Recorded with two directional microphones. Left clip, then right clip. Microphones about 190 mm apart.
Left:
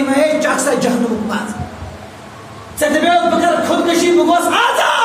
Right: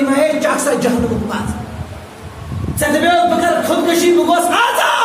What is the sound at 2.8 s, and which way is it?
A woman's voice, 10° right (ahead or behind).